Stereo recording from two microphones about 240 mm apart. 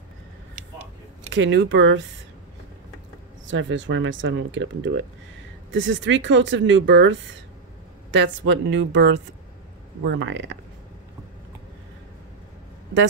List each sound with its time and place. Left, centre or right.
1.3 s speech: right
3.4 s speech: right